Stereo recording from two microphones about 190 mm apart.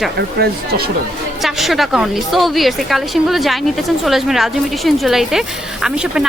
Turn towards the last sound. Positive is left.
turn(degrees=-5)  # may be behind; listen again after turning